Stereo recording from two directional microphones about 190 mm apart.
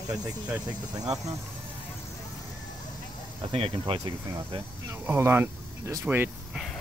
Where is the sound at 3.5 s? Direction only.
30° right (ahead or behind).